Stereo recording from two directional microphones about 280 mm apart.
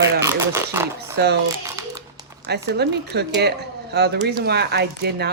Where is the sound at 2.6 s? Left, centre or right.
Right.